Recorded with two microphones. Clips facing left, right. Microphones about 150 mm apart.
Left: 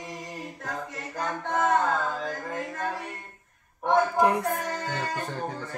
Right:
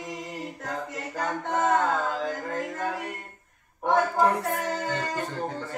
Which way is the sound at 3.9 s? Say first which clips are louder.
Even; 15° left (ahead or behind).